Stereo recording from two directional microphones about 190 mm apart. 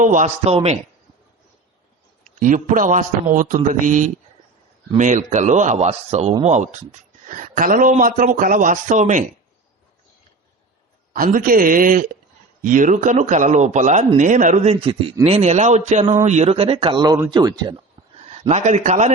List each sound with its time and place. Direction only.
0.0 s a man's voice: 40° right (ahead or behind)
2.4 s a man's voice: 40° right (ahead or behind)
11.1 s a man's voice: 45° right (ahead or behind); by 17.8 s 20° right (ahead or behind)
18.3 s a man's voice: 35° right (ahead or behind)